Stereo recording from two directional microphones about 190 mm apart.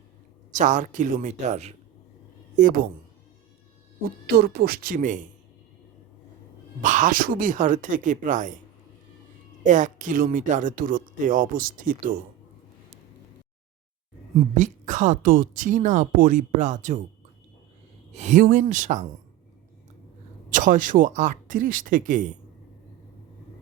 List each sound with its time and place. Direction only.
0.5 s speech: 40° right (ahead or behind)
4.3 s speech: 55° right (ahead or behind)
6.8 s speech: 40° right (ahead or behind)
9.6 s speech: 40° right (ahead or behind)
14.5 s speech: 40° right (ahead or behind)
18.1 s speech: 35° right (ahead or behind)
20.5 s speech: 45° right (ahead or behind)